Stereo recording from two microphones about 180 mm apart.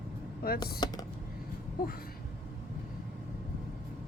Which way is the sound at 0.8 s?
25° left (ahead or behind).